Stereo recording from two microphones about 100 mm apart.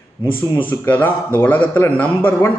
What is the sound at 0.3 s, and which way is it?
Speech, 15° left (ahead or behind).